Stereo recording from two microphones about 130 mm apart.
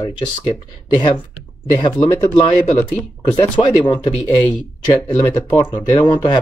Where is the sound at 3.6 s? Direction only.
35° left (ahead or behind).